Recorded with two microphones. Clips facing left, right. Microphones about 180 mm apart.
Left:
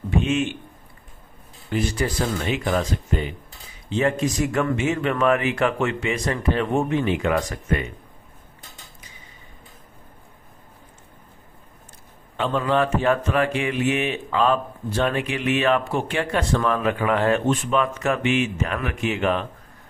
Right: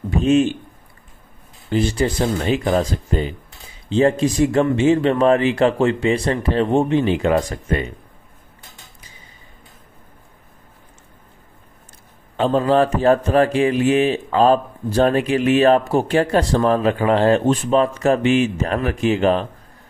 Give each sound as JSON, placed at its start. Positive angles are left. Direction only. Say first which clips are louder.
{"t": 0.2, "sound": "a man's voice", "louder": "right 11 dB", "side_deg": -35}
{"t": 1.7, "sound": "a man's voice", "louder": "right 5 dB", "side_deg": -30}
{"t": 12.4, "sound": "a man's voice", "louder": "right 6 dB", "side_deg": -35}